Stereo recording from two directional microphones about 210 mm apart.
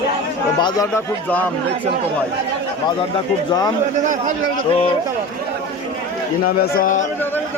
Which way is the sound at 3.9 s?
35° right (ahead or behind).